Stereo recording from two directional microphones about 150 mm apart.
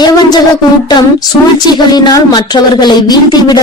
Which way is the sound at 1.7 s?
25° left (ahead or behind).